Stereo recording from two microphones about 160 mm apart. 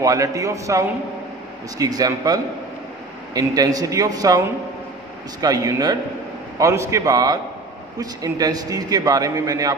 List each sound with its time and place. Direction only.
0.0 s a man's voice: 20° right (ahead or behind)
5.4 s a man's voice: 25° right (ahead or behind)